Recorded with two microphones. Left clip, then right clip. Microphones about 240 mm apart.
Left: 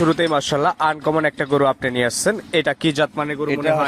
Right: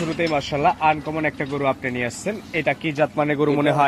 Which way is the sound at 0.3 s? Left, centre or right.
Left.